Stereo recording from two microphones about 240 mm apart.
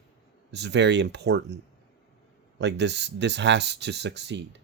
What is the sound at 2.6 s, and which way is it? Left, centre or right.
Speech, right.